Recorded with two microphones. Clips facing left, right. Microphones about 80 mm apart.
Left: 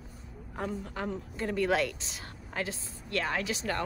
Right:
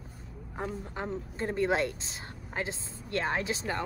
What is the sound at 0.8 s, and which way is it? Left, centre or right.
Speech, right.